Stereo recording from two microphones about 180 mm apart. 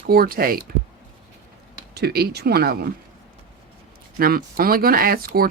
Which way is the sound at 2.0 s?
60° right (ahead or behind).